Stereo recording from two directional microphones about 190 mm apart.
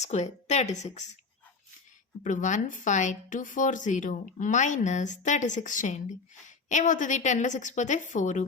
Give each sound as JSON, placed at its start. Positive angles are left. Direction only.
{"t": 0.0, "sound": "speech", "side_deg": 35}
{"t": 2.2, "sound": "speech", "side_deg": 40}